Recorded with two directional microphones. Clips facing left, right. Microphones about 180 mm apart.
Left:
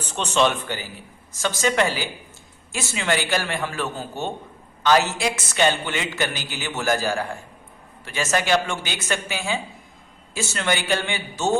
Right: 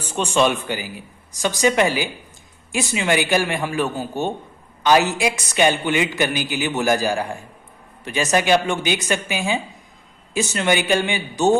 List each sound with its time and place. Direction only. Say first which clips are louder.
0.0 s a man's voice: right 2 dB; 10° right (ahead or behind)